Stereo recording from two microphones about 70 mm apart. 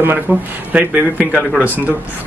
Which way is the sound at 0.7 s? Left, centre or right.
Centre.